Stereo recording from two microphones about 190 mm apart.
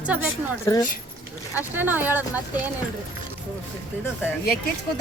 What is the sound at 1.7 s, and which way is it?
Speech, 10° right (ahead or behind).